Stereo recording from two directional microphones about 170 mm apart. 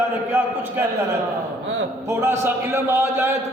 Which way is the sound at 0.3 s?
15° right (ahead or behind).